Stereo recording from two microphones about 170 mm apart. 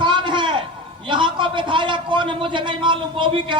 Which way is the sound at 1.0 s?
30° right (ahead or behind).